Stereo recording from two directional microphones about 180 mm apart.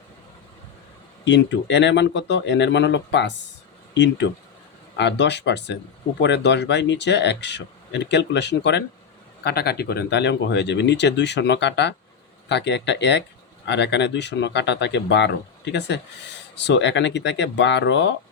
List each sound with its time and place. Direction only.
1.2 s speech: 75° left (ahead or behind)
9.4 s speech: 60° left (ahead or behind); by 18.1 s 80° left